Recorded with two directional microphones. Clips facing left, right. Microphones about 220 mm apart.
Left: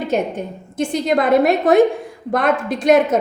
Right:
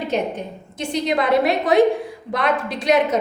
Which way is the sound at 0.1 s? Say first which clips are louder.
Left 3 dB; 50° left (ahead or behind).